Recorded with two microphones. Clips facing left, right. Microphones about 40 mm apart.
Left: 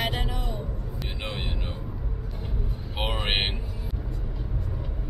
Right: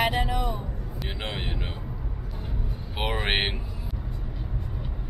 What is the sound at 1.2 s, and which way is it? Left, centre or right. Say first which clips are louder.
Vehicle: right 1 dB; centre.